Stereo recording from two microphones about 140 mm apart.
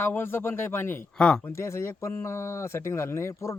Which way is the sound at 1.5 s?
20° left (ahead or behind).